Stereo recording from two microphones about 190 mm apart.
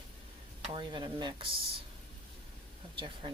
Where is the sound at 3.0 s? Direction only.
25° right (ahead or behind).